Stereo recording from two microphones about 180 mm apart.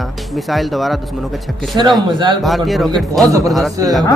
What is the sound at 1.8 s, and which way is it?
Speech, 25° right (ahead or behind).